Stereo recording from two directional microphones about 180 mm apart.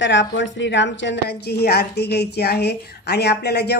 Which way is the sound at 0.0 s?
90° left.